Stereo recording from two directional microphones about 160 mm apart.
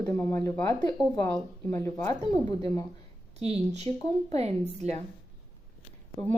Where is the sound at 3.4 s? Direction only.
45° right (ahead or behind).